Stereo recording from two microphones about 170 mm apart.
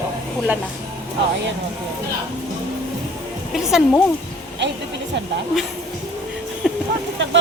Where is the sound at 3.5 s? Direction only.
5° right (ahead or behind).